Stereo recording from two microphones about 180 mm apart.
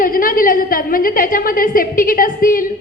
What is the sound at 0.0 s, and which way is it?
A woman's voice, 50° left (ahead or behind).